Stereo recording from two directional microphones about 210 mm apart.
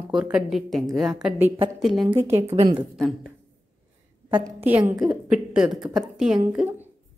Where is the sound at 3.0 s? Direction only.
Centre (ahead or behind).